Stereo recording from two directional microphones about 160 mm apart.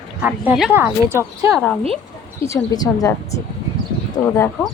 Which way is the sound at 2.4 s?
20° left (ahead or behind).